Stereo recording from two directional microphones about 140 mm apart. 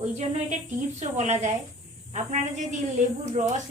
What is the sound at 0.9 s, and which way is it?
A woman's voice, 55° right (ahead or behind).